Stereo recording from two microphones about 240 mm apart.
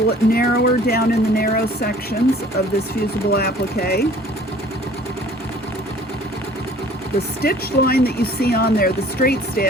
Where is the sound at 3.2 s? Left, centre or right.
Left.